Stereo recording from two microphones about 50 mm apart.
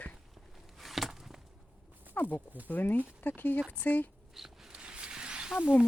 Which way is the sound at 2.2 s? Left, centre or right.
Left.